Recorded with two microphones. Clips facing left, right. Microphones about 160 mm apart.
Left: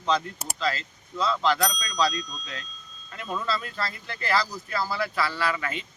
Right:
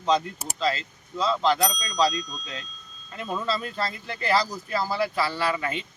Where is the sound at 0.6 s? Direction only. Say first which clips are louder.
Right 3 dB; 25° right (ahead or behind).